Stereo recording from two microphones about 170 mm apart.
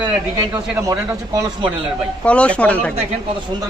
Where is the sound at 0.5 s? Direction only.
20° right (ahead or behind).